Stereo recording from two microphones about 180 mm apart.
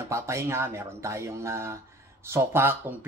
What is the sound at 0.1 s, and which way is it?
Speech, 15° right (ahead or behind).